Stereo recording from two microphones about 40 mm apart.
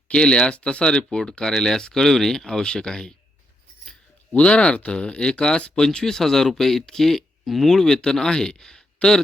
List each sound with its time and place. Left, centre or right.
0.1 s speech: left
4.4 s speech: left